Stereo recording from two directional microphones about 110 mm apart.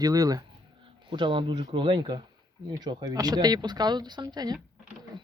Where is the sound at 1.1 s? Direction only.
45° right (ahead or behind).